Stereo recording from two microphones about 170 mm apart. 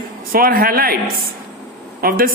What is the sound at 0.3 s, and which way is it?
Speech, 60° right (ahead or behind).